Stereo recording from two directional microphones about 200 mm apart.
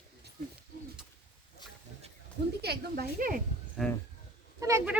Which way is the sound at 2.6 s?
50° right (ahead or behind).